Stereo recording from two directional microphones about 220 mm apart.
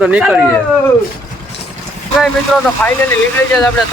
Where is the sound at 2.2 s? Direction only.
Centre (ahead or behind).